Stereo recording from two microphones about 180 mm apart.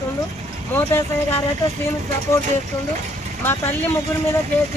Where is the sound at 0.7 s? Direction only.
10° left (ahead or behind).